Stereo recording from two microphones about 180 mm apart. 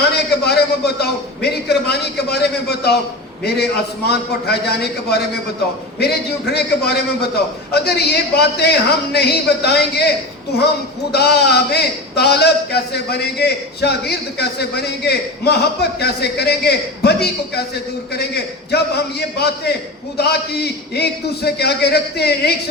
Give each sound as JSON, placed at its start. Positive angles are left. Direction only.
{"t": 0.2, "sound": "a man's voice", "side_deg": 65}
{"t": 11.1, "sound": "a man's voice", "side_deg": 65}